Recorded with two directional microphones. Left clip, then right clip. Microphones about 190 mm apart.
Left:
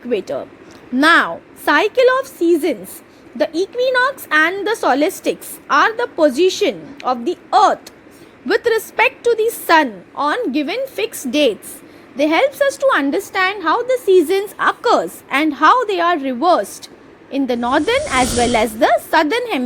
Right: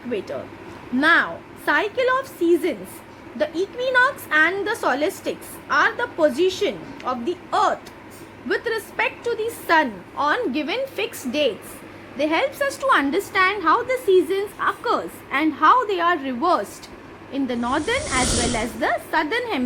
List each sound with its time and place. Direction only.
0.1 s a woman's voice: 40° left (ahead or behind)
18.0 s speech: centre (ahead or behind)
18.8 s a woman's voice: 40° left (ahead or behind)